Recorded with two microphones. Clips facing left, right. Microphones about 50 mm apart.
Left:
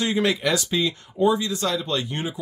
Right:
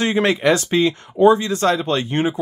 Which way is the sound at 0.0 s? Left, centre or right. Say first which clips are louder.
Right 5 dB; right.